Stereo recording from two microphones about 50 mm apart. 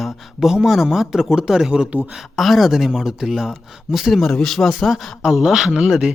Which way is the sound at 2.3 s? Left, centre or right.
Centre.